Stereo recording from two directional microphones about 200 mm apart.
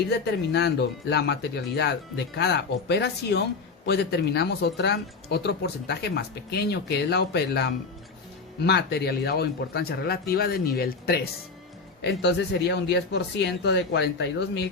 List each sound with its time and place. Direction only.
0.1 s speech: 60° left (ahead or behind)